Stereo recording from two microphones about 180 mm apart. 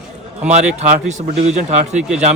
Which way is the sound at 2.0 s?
5° right (ahead or behind).